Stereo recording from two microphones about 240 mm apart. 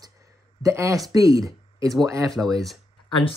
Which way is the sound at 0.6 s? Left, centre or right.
Centre.